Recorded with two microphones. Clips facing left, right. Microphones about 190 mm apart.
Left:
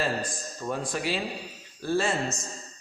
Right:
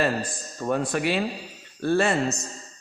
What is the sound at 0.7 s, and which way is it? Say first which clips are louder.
A man's voice: right 6 dB; 65° right (ahead or behind).